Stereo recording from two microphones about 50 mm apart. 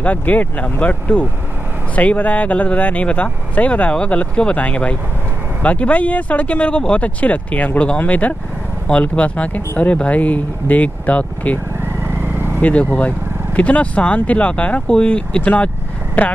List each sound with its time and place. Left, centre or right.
0.0 s speech: left
8.8 s speech: left
12.5 s speech: left